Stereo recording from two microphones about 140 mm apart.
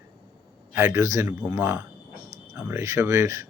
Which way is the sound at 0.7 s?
20° right (ahead or behind).